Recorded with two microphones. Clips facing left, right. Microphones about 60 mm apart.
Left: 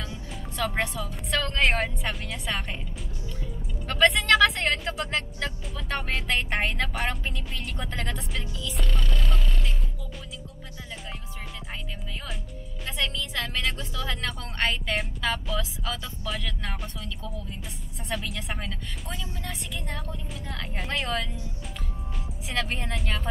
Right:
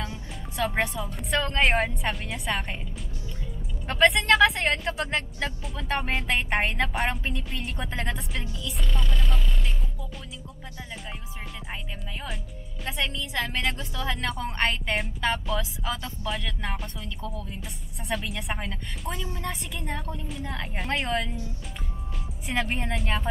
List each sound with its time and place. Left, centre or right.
0.6 s speech: centre
3.8 s a woman's voice: centre
8.7 s speech: centre
12.8 s a woman's voice: centre
13.7 s speech: right
14.3 s speech: centre
15.9 s a woman's voice: centre
16.3 s a woman's voice: centre
22.5 s a woman's voice: centre